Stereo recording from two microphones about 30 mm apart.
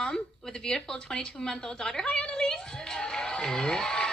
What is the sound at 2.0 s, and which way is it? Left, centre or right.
Speech, left.